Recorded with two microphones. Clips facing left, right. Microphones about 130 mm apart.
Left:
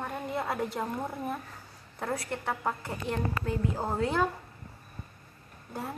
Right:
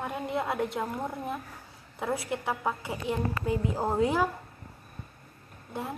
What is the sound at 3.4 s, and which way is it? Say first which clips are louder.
Speech: right 5 dB; 15° right (ahead or behind).